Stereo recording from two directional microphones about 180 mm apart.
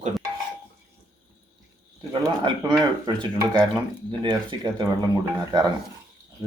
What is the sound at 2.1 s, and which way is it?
Speech, 20° right (ahead or behind).